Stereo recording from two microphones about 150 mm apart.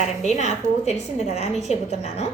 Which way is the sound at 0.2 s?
50° left (ahead or behind).